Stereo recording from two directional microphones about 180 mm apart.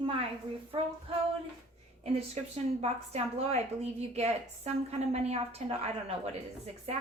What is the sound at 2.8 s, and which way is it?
A woman's voice, 35° right (ahead or behind).